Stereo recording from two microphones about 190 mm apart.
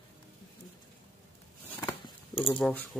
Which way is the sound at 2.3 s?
25° left (ahead or behind).